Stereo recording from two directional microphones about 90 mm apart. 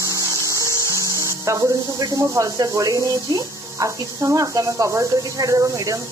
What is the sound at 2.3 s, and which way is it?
Speech, 40° right (ahead or behind).